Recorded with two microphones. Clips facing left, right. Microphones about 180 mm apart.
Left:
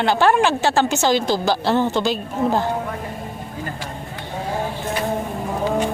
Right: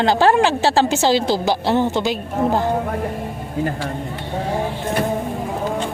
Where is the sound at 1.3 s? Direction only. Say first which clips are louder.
Right 1 dB; 20° right (ahead or behind).